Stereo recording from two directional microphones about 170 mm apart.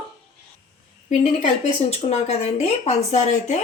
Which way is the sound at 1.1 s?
45° left (ahead or behind).